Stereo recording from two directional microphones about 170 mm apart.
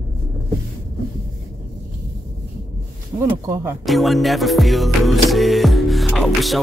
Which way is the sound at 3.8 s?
Centre (ahead or behind).